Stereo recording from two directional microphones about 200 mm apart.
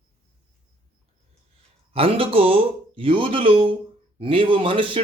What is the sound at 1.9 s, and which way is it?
Speech, 30° right (ahead or behind).